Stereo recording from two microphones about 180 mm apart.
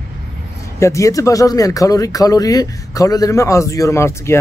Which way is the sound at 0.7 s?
15° left (ahead or behind).